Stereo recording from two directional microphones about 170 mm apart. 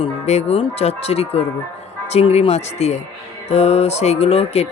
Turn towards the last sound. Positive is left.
turn(degrees=35)  # may be behind; listen again after turning